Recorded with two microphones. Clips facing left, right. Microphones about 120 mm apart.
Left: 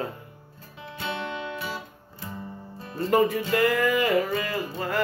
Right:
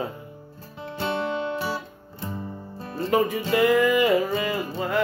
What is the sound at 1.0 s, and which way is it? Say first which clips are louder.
Music: right 6 dB; 35° right (ahead or behind).